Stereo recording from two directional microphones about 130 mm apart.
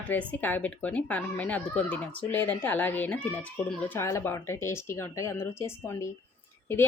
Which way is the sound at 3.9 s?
20° left (ahead or behind).